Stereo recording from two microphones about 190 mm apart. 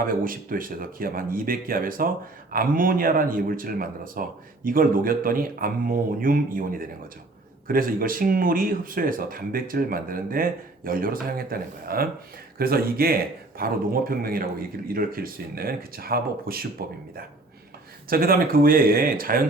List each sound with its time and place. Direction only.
0.0 s speech: 50° right (ahead or behind)
18.1 s speech: 50° right (ahead or behind)